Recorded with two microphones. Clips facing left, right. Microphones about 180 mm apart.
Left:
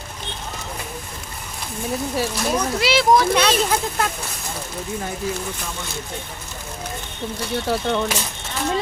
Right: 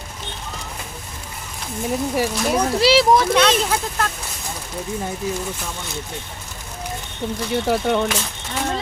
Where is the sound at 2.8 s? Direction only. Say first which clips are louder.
Right 6 dB; 35° right (ahead or behind).